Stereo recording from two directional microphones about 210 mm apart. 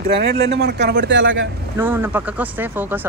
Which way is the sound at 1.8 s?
10° right (ahead or behind).